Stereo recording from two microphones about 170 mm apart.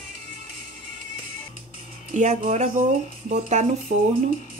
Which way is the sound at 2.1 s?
45° right (ahead or behind).